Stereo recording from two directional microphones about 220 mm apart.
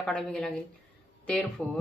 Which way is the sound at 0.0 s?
5° left (ahead or behind).